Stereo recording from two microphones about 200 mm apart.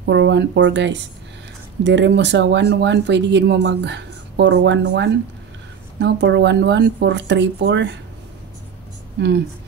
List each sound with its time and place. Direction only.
0.0 s speech: 60° right (ahead or behind)